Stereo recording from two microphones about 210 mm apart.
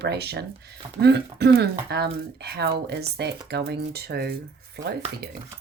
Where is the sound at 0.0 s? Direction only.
50° right (ahead or behind).